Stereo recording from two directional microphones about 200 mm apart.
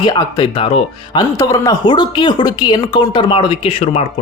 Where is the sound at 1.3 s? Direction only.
15° left (ahead or behind).